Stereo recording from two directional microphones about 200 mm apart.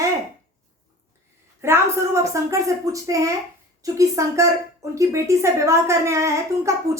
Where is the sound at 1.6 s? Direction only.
15° right (ahead or behind).